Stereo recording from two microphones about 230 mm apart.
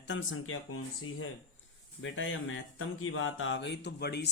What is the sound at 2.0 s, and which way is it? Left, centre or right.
Speech, left.